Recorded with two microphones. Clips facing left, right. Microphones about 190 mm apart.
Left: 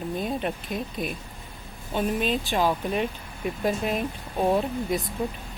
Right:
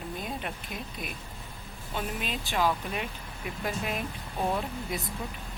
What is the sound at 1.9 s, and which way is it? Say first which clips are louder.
Speech: left 9 dB; 20° left (ahead or behind).